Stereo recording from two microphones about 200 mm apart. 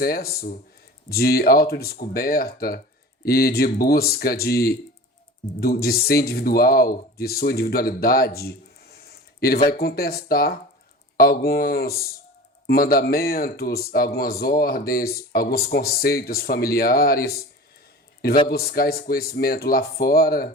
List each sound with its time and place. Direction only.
0.0 s speech: 50° left (ahead or behind)
18.4 s speech: 50° left (ahead or behind)